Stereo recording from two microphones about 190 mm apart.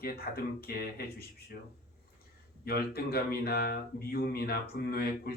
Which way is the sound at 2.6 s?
55° left (ahead or behind).